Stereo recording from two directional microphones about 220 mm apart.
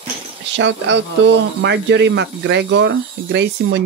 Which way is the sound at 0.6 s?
55° right (ahead or behind).